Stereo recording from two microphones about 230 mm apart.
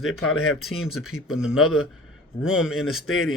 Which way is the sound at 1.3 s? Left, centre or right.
Centre.